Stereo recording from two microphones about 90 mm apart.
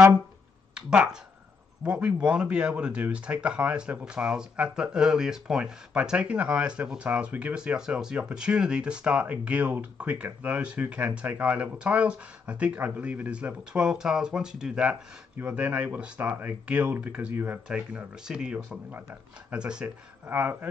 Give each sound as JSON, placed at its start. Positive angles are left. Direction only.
{"t": 0.7, "sound": "speech", "side_deg": -10}
{"t": 18.9, "sound": "speech", "side_deg": -20}
{"t": 19.6, "sound": "speech", "side_deg": -10}